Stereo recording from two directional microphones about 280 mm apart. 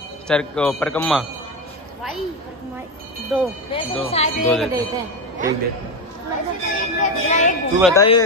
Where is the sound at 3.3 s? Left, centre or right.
Centre.